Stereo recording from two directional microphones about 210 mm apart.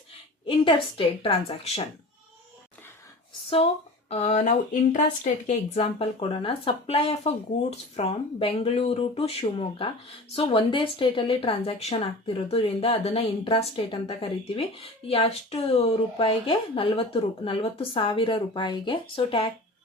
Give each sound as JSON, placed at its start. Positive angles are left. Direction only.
{"t": 0.4, "sound": "speech", "side_deg": 25}
{"t": 4.1, "sound": "speech", "side_deg": 30}